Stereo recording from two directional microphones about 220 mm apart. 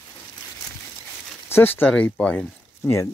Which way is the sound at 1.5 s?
10° left (ahead or behind).